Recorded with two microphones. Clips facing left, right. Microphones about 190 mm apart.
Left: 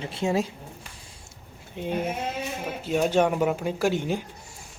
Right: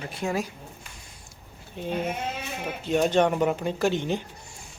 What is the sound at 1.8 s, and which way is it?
Speech, 15° left (ahead or behind).